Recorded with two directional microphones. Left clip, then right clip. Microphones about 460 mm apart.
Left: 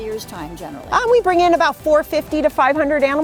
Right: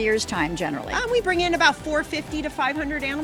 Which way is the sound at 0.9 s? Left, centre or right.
Left.